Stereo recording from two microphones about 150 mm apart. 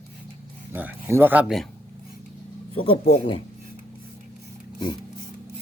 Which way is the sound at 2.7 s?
35° left (ahead or behind).